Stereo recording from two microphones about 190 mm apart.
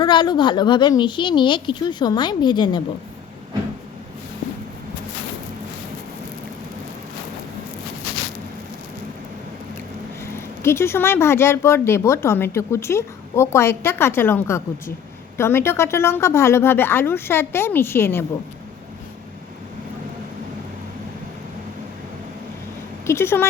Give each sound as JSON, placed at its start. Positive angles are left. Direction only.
{"t": 0.0, "sound": "a woman's voice", "side_deg": 25}
{"t": 10.3, "sound": "speech", "side_deg": 15}
{"t": 23.0, "sound": "speech", "side_deg": 15}